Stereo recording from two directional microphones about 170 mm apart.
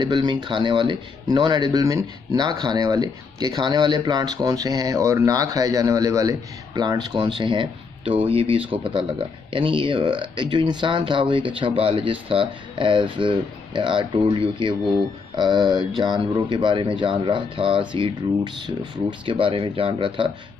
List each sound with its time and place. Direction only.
0.0 s speech: 25° right (ahead or behind)